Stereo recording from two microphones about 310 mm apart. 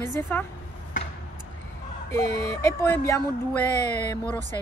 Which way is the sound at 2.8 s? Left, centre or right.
Centre.